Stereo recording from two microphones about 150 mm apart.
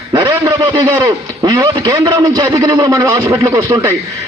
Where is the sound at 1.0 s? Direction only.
25° right (ahead or behind).